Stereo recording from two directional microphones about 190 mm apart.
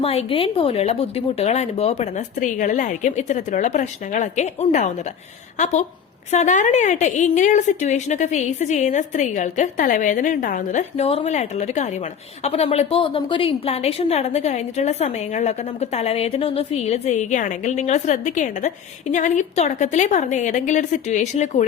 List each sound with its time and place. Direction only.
0.0 s a woman's voice: 30° left (ahead or behind)